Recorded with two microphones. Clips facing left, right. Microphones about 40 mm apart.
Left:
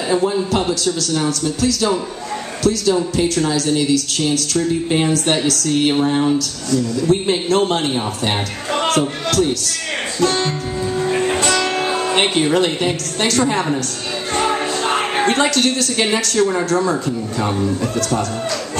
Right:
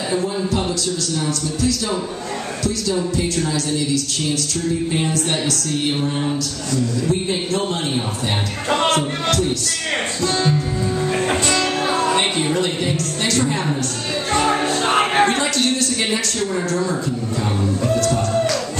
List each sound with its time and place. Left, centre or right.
0.1 s a man's voice: left
8.6 s music: right
8.9 s speech: left
10.2 s music: left
12.1 s music: left
12.5 s a man's voice: left
15.2 s a man's voice: left